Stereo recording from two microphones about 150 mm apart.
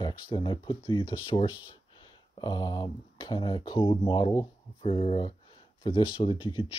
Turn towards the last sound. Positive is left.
turn(degrees=35)  # may be behind; listen again after turning